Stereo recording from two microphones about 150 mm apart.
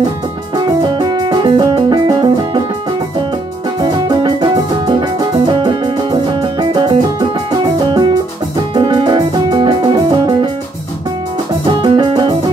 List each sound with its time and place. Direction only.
0.9 s music: 30° right (ahead or behind)
3.8 s music: 30° right (ahead or behind)
11.8 s music: 30° right (ahead or behind)